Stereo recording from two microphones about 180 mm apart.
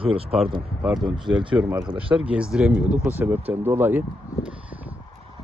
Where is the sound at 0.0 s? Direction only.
30° right (ahead or behind).